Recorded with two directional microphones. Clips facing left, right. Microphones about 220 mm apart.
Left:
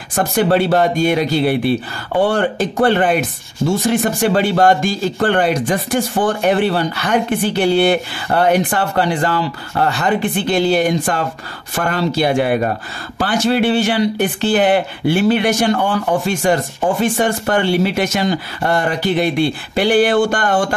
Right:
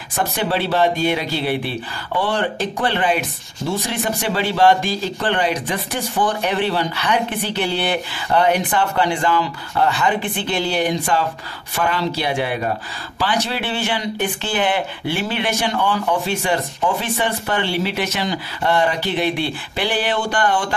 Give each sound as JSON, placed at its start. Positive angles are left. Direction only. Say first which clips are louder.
{"t": 0.1, "sound": "speech", "louder": "left 7 dB", "side_deg": 50}